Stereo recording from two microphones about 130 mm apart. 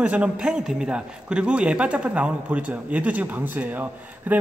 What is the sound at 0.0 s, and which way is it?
A man's voice, 10° right (ahead or behind).